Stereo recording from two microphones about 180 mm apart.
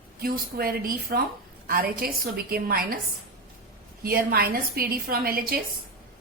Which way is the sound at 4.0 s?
55° right (ahead or behind).